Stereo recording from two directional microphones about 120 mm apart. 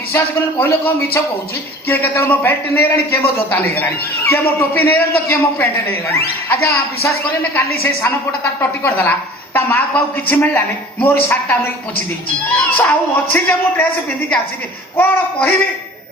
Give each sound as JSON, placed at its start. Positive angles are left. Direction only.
{"t": 0.6, "sound": "a man's voice", "side_deg": 20}
{"t": 8.8, "sound": "a man's voice", "side_deg": 15}
{"t": 12.7, "sound": "a man's voice", "side_deg": 15}
{"t": 14.9, "sound": "a man's voice", "side_deg": 15}